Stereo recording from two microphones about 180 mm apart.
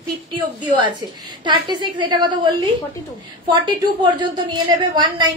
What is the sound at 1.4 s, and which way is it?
A woman's voice, 25° right (ahead or behind).